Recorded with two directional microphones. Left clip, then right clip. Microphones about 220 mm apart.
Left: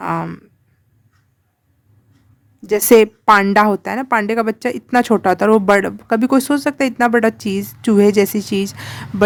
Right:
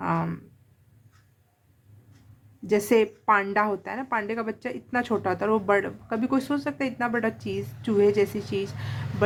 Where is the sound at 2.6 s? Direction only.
50° left (ahead or behind).